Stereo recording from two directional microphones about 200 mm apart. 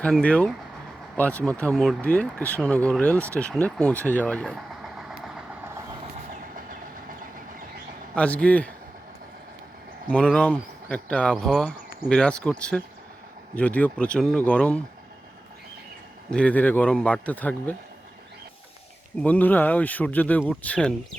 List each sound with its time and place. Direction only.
0.0 s speech: 5° left (ahead or behind)
8.1 s speech: 5° left (ahead or behind)
10.1 s speech: 5° left (ahead or behind)
16.3 s speech: 5° left (ahead or behind)
19.2 s speech: 10° left (ahead or behind)